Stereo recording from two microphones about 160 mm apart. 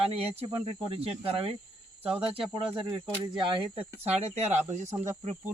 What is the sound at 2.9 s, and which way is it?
Speech, 30° right (ahead or behind).